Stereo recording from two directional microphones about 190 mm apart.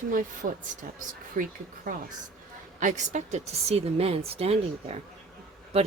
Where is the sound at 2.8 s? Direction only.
40° right (ahead or behind).